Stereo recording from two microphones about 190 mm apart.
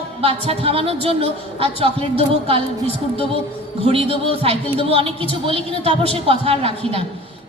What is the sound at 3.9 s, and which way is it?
A woman's voice, 30° right (ahead or behind).